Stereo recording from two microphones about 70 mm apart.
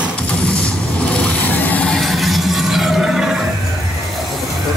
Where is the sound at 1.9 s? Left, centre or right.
Centre.